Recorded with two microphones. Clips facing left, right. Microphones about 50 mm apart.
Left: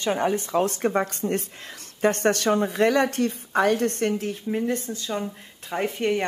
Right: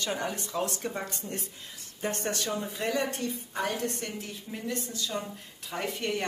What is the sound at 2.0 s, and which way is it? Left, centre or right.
A woman's voice, left.